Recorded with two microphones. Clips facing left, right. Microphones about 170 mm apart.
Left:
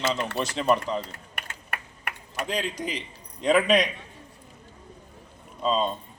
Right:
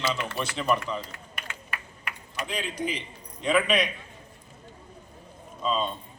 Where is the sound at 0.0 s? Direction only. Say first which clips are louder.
Left 3 dB; 40° left (ahead or behind).